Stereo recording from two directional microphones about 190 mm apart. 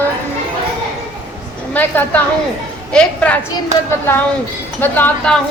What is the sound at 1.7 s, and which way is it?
A woman's voice, 10° left (ahead or behind).